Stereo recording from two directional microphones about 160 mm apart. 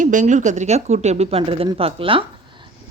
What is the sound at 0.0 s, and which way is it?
A woman's voice, 50° right (ahead or behind).